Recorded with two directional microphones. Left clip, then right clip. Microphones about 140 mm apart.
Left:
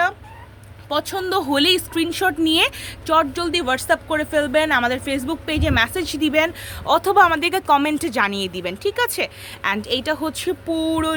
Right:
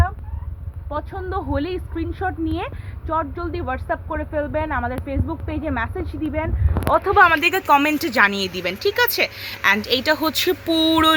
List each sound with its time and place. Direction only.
0.9 s speech: 20° left (ahead or behind); by 11.1 s centre (ahead or behind)